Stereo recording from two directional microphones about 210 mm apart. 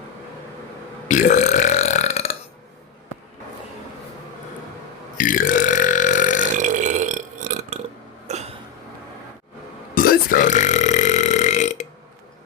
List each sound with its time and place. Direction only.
1.0 s burping: 35° left (ahead or behind)
5.1 s burping: 40° left (ahead or behind)
6.6 s burping: 35° right (ahead or behind)
9.9 s burping: 45° left (ahead or behind)